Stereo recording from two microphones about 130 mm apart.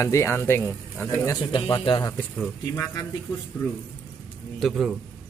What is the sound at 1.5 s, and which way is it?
Speech, 40° left (ahead or behind).